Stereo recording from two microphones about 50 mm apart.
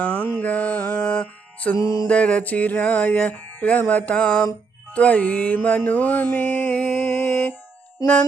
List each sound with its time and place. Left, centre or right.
0.0 s music: left
1.0 s music: centre
1.7 s music: left
2.0 s music: left
4.9 s mantra: left
7.1 s music: left